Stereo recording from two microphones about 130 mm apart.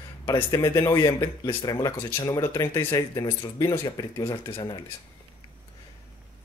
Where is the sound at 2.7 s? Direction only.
15° left (ahead or behind).